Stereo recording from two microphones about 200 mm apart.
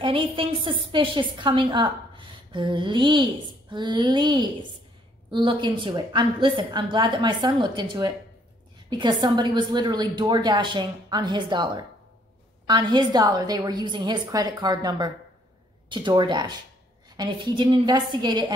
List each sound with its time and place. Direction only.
0.0 s a woman's voice: 25° right (ahead or behind)